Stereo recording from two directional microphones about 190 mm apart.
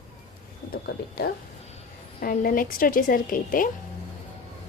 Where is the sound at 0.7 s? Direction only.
55° left (ahead or behind).